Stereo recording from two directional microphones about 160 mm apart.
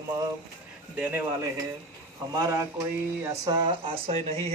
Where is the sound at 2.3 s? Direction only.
20° right (ahead or behind).